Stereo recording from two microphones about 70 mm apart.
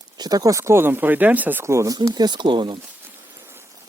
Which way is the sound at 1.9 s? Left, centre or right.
Right.